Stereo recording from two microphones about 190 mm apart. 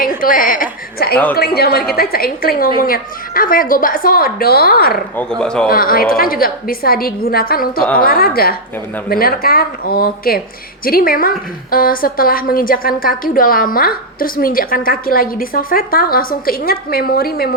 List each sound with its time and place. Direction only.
0.2 s a woman's voice: 45° left (ahead or behind)
5.4 s speech: 5° left (ahead or behind)
5.6 s a woman's voice: 50° left (ahead or behind)